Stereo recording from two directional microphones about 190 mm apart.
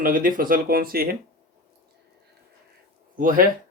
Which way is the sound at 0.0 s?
45° right (ahead or behind).